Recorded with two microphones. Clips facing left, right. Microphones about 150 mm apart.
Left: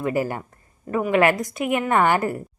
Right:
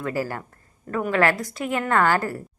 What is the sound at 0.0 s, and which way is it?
A woman's voice, 20° left (ahead or behind).